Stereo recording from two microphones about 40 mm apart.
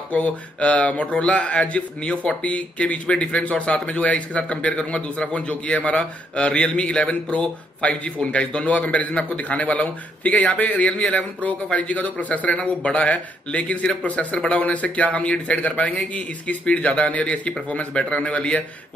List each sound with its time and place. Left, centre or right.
0.1 s a man's voice: left